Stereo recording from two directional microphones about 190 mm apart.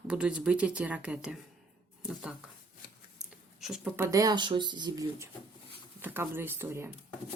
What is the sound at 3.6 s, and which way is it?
Speech, 5° right (ahead or behind).